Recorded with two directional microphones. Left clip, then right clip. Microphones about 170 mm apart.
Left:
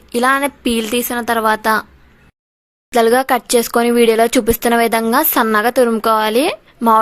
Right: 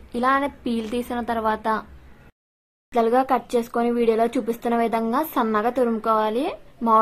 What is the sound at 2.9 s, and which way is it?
Speech, 20° left (ahead or behind).